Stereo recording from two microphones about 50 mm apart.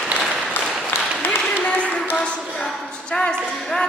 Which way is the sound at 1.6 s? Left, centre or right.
Left.